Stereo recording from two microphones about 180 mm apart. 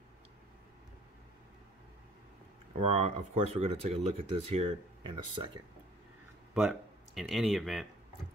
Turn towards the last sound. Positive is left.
turn(degrees=0)  # may be behind; listen again after turning